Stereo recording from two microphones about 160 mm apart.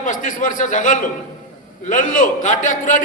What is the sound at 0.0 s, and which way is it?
A man's voice, 55° left (ahead or behind).